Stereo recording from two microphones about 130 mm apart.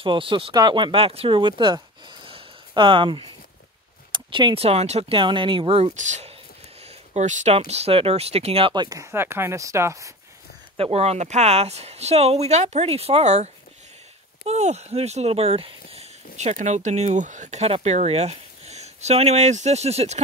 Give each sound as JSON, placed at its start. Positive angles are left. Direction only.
{"t": 0.0, "sound": "speech", "side_deg": -40}
{"t": 5.2, "sound": "speech", "side_deg": -40}
{"t": 8.8, "sound": "speech", "side_deg": -25}
{"t": 10.8, "sound": "speech", "side_deg": -50}